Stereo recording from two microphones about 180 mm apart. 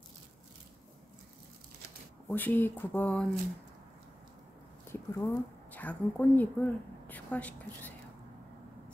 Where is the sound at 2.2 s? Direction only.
10° left (ahead or behind).